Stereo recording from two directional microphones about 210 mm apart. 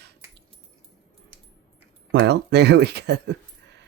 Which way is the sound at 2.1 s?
55° right (ahead or behind).